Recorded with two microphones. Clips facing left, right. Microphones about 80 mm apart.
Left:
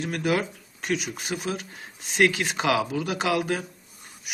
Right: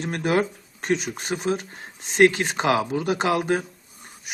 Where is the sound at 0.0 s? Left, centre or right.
Right.